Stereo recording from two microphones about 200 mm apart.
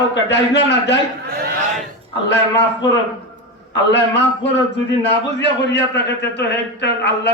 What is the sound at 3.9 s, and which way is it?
A man's voice, 60° left (ahead or behind).